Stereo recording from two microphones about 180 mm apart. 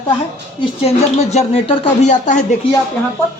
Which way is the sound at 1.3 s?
35° left (ahead or behind).